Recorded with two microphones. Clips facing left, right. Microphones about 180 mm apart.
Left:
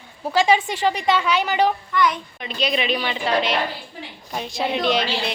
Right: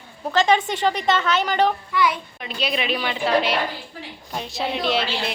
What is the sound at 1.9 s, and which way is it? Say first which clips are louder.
A woman's voice: left 1 dB; 5° right (ahead or behind).